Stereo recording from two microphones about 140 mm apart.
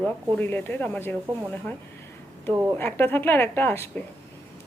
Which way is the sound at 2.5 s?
15° right (ahead or behind).